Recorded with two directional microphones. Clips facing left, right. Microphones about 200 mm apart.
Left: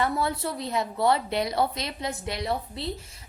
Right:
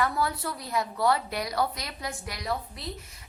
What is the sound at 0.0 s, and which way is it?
A woman's voice, 25° left (ahead or behind).